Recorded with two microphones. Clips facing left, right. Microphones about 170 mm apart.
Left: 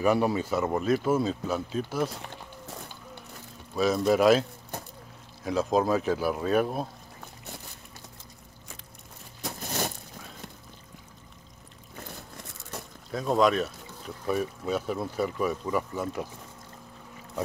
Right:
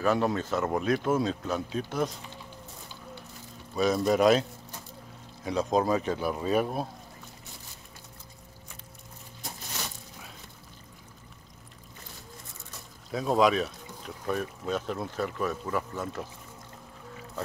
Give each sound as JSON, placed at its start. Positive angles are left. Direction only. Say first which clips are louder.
{"t": 0.0, "sound": "speech", "louder": "left 2 dB", "side_deg": 10}
{"t": 3.7, "sound": "speech", "louder": "left 1 dB", "side_deg": 0}
{"t": 9.7, "sound": "a sound", "louder": "left 9 dB", "side_deg": 50}
{"t": 13.1, "sound": "speech", "louder": "even", "side_deg": 0}